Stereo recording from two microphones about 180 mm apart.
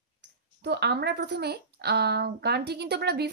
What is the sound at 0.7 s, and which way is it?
A woman's voice, 65° right (ahead or behind).